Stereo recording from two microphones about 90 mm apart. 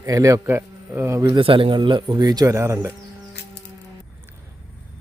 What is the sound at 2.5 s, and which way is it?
Speech, 30° right (ahead or behind).